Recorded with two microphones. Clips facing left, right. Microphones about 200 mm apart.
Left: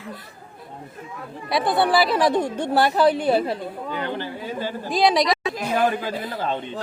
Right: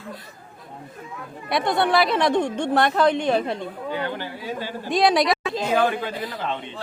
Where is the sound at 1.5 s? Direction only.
Centre (ahead or behind).